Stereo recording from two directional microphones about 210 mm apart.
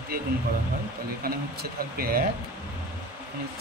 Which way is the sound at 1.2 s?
45° right (ahead or behind).